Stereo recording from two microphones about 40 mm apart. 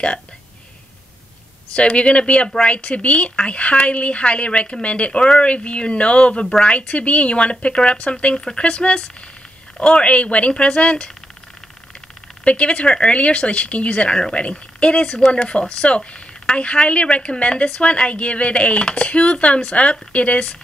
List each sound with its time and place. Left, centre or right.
1.8 s speech: left
12.4 s speech: left